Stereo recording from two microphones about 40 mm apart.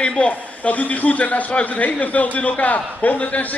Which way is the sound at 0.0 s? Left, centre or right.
Left.